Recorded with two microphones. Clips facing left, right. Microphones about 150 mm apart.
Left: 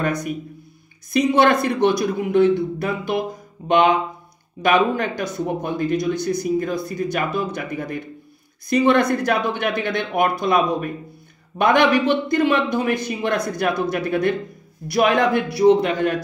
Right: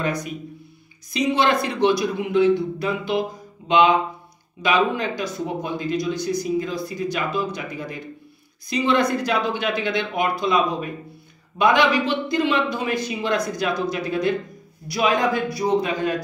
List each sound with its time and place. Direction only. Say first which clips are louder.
0.0 s a man's voice: left 3 dB; 50° left (ahead or behind)